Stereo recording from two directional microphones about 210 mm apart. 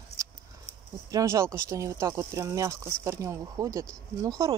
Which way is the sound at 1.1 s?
15° right (ahead or behind).